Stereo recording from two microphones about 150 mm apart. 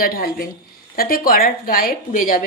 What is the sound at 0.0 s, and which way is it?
A woman's voice, 80° left.